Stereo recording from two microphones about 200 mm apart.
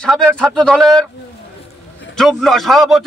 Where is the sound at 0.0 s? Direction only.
5° left (ahead or behind).